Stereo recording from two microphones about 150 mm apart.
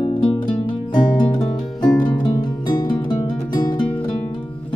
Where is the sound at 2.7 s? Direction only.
30° left (ahead or behind).